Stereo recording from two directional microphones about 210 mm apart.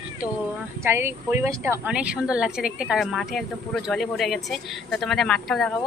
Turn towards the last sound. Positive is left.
turn(degrees=0)  # may be behind; listen again after turning